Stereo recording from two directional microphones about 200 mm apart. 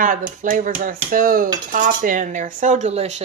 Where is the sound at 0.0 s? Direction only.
45° right (ahead or behind).